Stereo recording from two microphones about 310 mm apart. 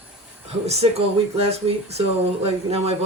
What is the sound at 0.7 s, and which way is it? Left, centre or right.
Speech, centre.